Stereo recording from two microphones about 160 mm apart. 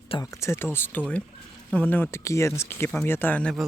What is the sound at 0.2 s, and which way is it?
Speech, 20° left (ahead or behind).